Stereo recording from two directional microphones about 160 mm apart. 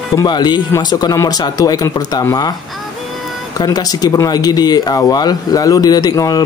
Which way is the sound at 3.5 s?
25° left (ahead or behind).